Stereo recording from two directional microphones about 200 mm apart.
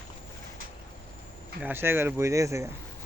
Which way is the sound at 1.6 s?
10° right (ahead or behind).